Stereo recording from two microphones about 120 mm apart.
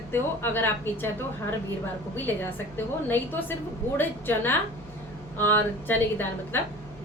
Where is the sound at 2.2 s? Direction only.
15° left (ahead or behind).